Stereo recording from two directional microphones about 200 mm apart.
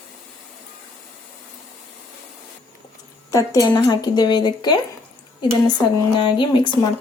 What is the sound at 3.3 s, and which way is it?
Speech, 15° left (ahead or behind).